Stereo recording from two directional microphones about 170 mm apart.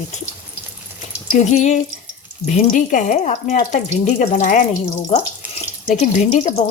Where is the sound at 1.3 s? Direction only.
45° left (ahead or behind).